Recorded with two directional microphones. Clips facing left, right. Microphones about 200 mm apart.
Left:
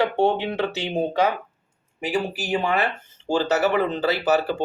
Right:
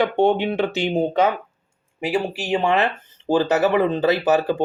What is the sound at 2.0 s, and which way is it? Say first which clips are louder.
Speech: right 2 dB; 30° right (ahead or behind).